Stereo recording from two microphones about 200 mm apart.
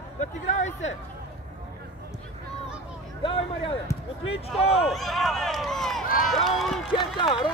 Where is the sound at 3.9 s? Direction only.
15° left (ahead or behind).